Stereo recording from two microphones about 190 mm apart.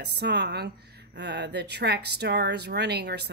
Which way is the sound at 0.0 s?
60° right (ahead or behind).